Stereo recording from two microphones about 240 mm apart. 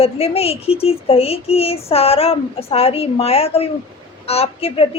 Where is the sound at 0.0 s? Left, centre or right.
Left.